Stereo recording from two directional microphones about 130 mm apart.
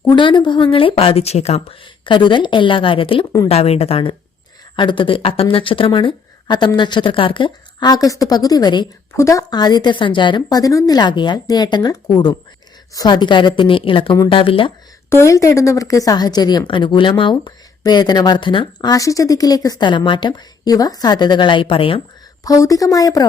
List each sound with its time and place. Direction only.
0.1 s a woman's voice: 35° left (ahead or behind); by 1.9 s 55° left (ahead or behind)
2.0 s a woman's voice: 35° left (ahead or behind)
4.8 s a woman's voice: 40° left (ahead or behind)
15.1 s a woman's voice: 25° left (ahead or behind); by 22.0 s 45° left (ahead or behind)
22.4 s a woman's voice: 25° left (ahead or behind)